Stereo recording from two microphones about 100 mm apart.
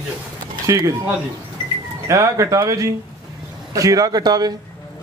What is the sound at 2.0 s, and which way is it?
A man's voice, 30° right (ahead or behind).